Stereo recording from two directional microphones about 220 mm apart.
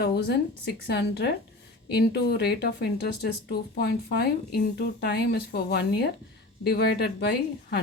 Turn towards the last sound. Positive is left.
turn(degrees=50)  # may be behind; listen again after turning